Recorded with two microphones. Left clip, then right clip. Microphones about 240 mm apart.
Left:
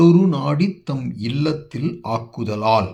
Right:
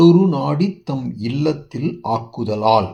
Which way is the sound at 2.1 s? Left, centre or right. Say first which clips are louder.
Right 3 dB; left.